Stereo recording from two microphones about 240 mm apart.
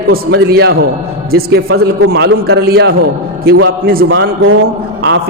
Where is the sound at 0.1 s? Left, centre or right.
Right.